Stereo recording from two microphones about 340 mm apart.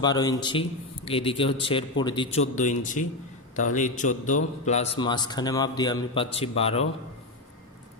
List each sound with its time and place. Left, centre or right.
0.0 s a man's voice: centre